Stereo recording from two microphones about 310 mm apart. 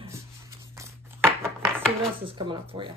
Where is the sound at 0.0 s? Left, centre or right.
Centre.